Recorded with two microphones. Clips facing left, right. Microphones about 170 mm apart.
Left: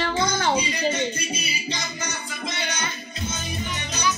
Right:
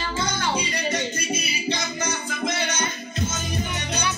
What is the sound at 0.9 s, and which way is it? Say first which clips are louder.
Music: even; 65° right (ahead or behind).